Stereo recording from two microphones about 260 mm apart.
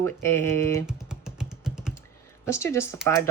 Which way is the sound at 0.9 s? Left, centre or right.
Centre.